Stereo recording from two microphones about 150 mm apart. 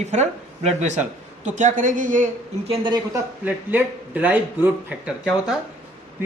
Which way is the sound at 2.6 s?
40° right (ahead or behind).